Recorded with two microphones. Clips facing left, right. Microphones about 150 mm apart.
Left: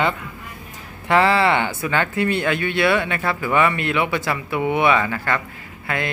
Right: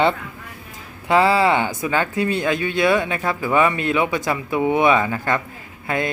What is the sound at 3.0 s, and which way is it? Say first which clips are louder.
Speech: right 1 dB; 15° right (ahead or behind).